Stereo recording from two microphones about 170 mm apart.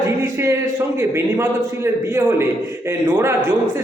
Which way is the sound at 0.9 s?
15° right (ahead or behind).